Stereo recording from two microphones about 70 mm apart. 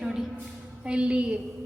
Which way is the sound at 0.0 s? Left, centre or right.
Centre.